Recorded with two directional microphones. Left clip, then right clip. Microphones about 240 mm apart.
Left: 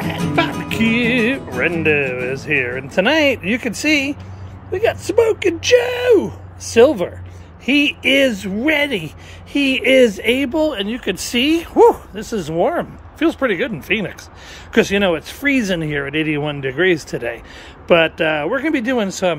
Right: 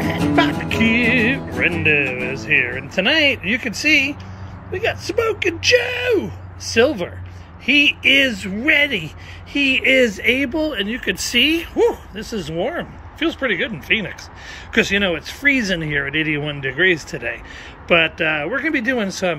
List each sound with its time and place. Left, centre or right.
0.0 s speech: centre
5.8 s speech: left
7.7 s speech: left
8.4 s speech: centre
8.6 s speech: left
8.9 s speech: centre